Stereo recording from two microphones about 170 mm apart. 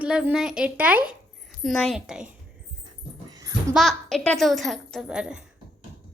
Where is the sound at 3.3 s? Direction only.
20° right (ahead or behind).